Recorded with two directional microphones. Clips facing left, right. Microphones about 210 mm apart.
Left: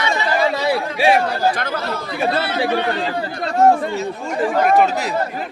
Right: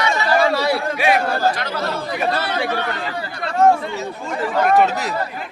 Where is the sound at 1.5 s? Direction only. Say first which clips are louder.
Left 2 dB; 50° left (ahead or behind).